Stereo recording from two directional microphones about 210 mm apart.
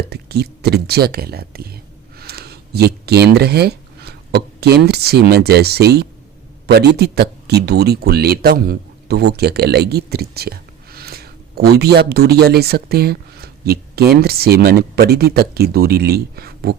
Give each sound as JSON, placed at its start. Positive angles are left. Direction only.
{"t": 0.1, "sound": "speech", "side_deg": -50}